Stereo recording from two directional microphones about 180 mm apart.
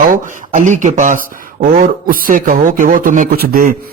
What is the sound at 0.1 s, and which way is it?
Speech, 45° right (ahead or behind).